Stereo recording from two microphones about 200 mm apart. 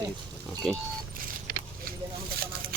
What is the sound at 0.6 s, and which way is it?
Speech, centre (ahead or behind).